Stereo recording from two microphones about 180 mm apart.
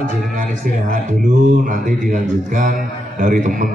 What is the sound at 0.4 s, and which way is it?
A man's voice, 50° right (ahead or behind).